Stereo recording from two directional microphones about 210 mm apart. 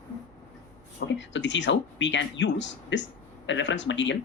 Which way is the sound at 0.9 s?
60° left (ahead or behind).